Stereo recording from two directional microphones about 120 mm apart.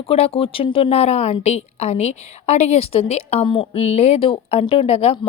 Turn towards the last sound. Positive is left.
turn(degrees=55)  # may be behind; listen again after turning